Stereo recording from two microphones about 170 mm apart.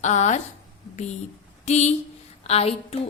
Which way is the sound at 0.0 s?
45° left (ahead or behind).